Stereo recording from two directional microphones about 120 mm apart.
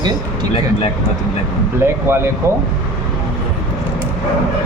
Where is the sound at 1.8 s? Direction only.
20° right (ahead or behind).